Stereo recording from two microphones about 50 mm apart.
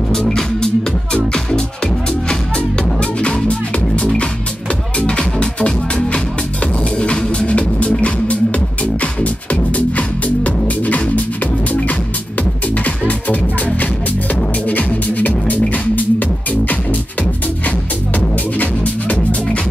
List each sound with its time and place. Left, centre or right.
0.1 s music: centre
3.0 s music: left
12.7 s music: left
18.6 s music: left